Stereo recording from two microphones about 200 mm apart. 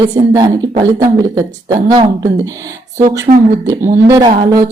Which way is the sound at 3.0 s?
40° right (ahead or behind).